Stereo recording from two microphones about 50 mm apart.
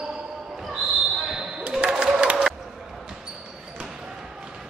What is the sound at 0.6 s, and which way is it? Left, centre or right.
Basketball bounce, centre.